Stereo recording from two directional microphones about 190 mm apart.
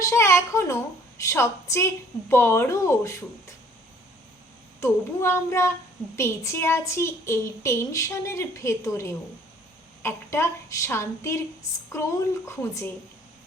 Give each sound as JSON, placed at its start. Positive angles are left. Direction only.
{"t": 0.0, "sound": "a woman's voice", "side_deg": 15}
{"t": 4.8, "sound": "a woman's voice", "side_deg": 15}